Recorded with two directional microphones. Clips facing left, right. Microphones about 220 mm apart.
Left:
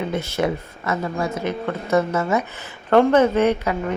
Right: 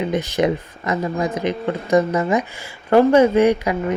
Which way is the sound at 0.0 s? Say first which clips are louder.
Right 3 dB; 15° right (ahead or behind).